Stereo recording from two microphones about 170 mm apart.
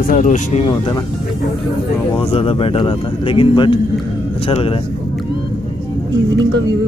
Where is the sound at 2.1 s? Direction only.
35° left (ahead or behind).